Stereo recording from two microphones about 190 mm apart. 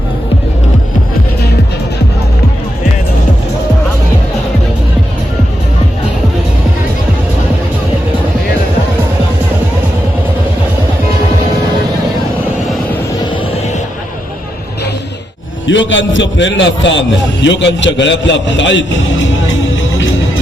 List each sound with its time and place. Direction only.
15.6 s a man's voice: 75° left (ahead or behind)